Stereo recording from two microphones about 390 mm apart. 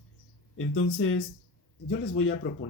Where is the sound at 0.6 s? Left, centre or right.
Left.